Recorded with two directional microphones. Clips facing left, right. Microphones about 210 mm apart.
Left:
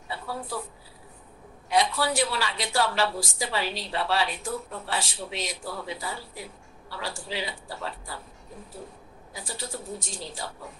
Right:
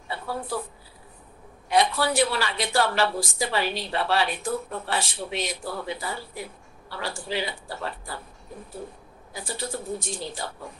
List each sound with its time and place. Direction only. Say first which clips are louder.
0.1 s a sound: right 3 dB; 55° right (ahead or behind)
1.7 s a woman's voice: right 2 dB; 55° right (ahead or behind)
9.3 s a woman's voice: right 4 dB; 60° right (ahead or behind)